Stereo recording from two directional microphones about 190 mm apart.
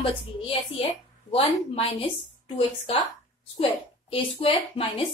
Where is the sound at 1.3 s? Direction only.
30° left (ahead or behind).